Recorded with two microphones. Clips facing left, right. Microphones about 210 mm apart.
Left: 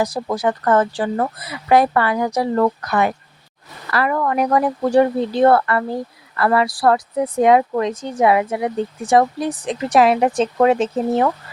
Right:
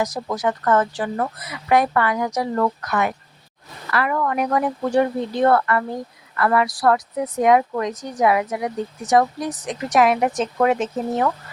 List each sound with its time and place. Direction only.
0.0 s speech: 30° left (ahead or behind)